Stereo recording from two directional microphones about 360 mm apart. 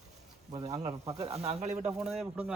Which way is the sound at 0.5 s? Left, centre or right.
Centre.